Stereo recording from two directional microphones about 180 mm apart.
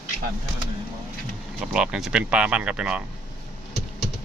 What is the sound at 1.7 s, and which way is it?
Speech, 5° right (ahead or behind).